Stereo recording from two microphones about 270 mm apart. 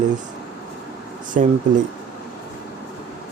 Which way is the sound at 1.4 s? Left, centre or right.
Right.